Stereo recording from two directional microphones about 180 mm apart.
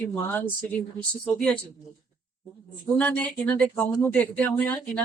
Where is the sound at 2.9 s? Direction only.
10° left (ahead or behind).